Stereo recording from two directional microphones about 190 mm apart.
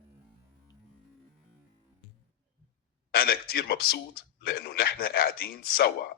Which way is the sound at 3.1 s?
55° left (ahead or behind).